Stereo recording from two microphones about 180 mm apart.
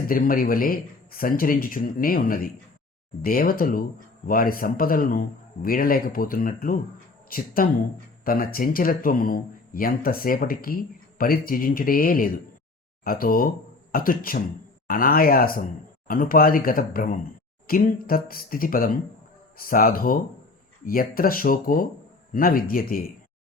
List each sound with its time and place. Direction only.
0.1 s speech: 50° left (ahead or behind)